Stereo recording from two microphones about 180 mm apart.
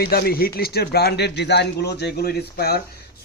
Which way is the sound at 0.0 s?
60° left (ahead or behind).